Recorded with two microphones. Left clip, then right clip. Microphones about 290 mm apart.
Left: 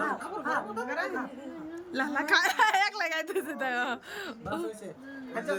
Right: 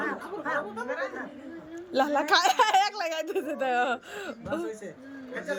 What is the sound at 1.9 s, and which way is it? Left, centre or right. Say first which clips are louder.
A woman's voice: right 3 dB; centre.